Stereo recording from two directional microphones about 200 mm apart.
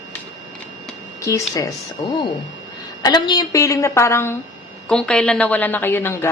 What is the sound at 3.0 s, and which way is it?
A woman's voice, 20° left (ahead or behind).